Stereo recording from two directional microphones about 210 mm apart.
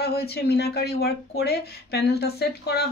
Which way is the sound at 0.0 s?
50° left (ahead or behind).